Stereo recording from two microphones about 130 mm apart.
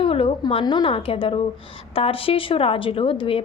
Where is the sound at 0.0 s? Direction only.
45° left (ahead or behind).